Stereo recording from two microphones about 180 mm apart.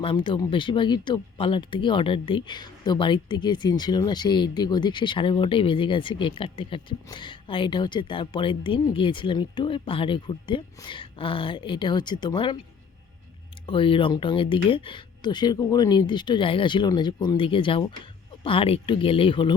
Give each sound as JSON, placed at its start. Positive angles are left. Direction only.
{"t": 0.0, "sound": "speech", "side_deg": 30}
{"t": 13.7, "sound": "speech", "side_deg": 30}